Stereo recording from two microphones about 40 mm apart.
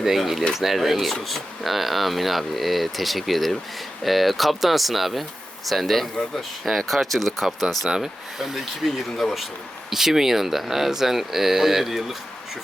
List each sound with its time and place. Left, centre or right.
0.0 s speech: centre
7.9 s speech: centre
8.8 s speech: centre